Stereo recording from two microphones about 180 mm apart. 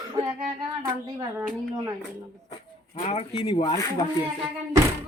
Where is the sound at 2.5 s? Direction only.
35° left (ahead or behind).